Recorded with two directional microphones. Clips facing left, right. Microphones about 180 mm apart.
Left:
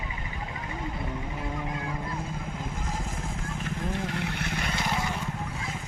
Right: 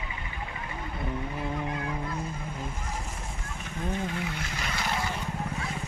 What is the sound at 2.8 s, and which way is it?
Vehicle, 90° left.